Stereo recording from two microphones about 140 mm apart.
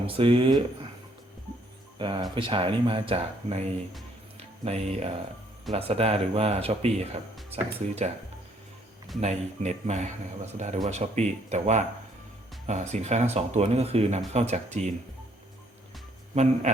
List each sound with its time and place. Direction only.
0.0 s speech: 40° right (ahead or behind)
2.0 s speech: 35° right (ahead or behind)
9.2 s speech: 50° right (ahead or behind)
16.3 s speech: 55° right (ahead or behind)